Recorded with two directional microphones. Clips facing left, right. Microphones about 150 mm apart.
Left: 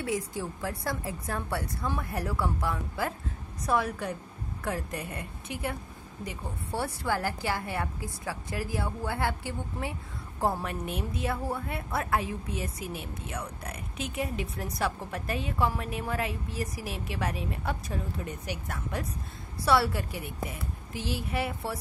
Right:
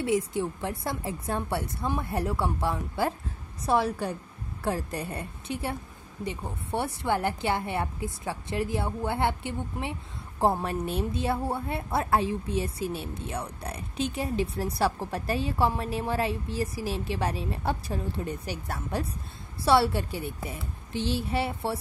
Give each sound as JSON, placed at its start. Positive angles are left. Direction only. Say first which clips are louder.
{"t": 0.0, "sound": "a woman's voice", "louder": "right 5 dB", "side_deg": -25}